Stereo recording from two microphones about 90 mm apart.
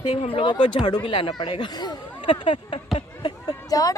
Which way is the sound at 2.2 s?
70° left (ahead or behind).